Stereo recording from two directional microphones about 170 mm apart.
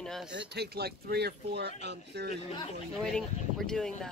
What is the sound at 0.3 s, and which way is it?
Speech, 80° right.